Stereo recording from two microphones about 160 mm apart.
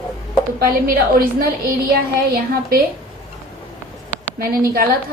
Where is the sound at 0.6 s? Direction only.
70° right (ahead or behind).